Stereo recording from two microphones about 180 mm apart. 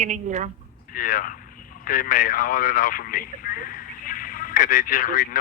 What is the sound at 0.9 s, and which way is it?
Speech, 50° left (ahead or behind).